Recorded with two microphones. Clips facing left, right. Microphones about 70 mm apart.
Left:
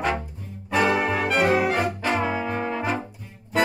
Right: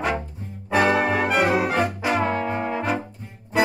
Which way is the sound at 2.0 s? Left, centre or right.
Centre.